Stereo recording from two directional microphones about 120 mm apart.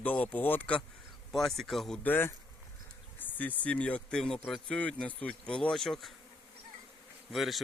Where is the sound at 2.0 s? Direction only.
15° left (ahead or behind).